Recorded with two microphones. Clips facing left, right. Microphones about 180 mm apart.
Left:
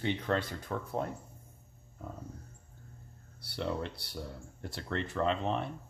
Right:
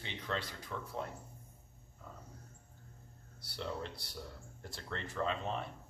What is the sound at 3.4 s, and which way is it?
Speech, 65° left (ahead or behind).